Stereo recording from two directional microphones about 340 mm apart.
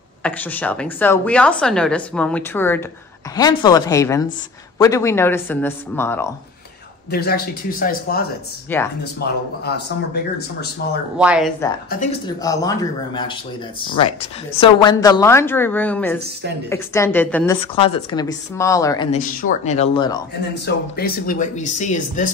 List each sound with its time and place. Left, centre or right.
0.2 s a woman's voice: centre
7.1 s speech: left
8.7 s a woman's voice: centre
9.2 s speech: left
11.1 s a woman's voice: centre
12.3 s speech: centre
17.7 s speech: centre
19.1 s speech: left
20.5 s speech: left